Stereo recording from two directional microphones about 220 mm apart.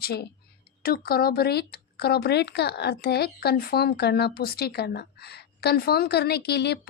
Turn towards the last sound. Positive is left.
turn(degrees=50)  # may be behind; listen again after turning